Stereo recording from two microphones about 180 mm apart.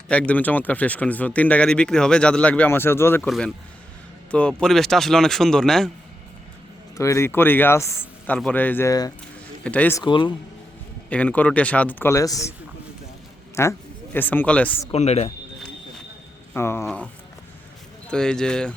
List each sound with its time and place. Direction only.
0.1 s speech: 5° left (ahead or behind)
3.2 s speech: centre (ahead or behind)
6.9 s speech: 15° left (ahead or behind)
9.6 s speech: 10° left (ahead or behind)
10.0 s a man's voice: 25° left (ahead or behind)
11.1 s speech: 5° left (ahead or behind)
13.6 s speech: 15° left (ahead or behind)
14.9 s speech: 35° left (ahead or behind)
16.6 s speech: 15° left (ahead or behind)
18.1 s speech: 5° left (ahead or behind)